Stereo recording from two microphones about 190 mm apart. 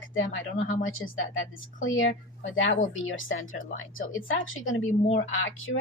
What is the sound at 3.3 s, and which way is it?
Speech, 45° left (ahead or behind).